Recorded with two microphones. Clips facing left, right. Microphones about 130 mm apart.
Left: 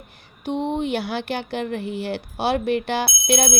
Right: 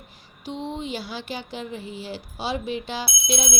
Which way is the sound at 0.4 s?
60° left (ahead or behind).